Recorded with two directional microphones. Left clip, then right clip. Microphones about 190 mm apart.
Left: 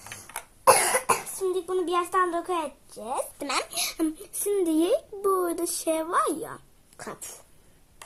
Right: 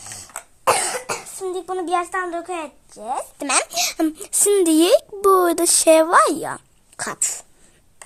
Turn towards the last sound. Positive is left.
turn(degrees=-65)  # may be behind; listen again after turning